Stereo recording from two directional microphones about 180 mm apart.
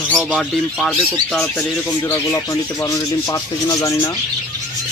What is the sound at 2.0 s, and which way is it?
Rub, 20° left (ahead or behind).